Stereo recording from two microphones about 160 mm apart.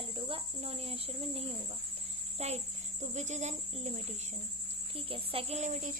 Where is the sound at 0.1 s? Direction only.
35° right (ahead or behind).